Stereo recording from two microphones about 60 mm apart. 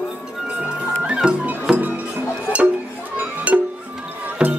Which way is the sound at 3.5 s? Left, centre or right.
Right.